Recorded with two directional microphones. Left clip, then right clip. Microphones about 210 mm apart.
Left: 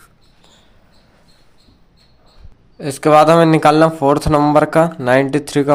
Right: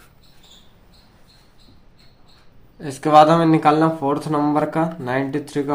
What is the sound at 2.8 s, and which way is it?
Speech, 40° left (ahead or behind).